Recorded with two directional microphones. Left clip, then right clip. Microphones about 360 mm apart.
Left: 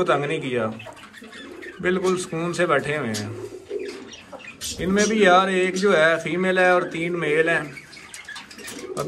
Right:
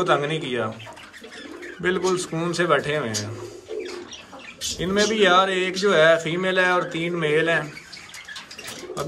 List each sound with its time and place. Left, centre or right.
0.0 s a man's voice: centre
1.8 s a man's voice: centre
4.7 s speech: centre